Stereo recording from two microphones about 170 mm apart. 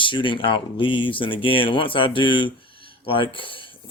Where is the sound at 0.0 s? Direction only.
30° left (ahead or behind).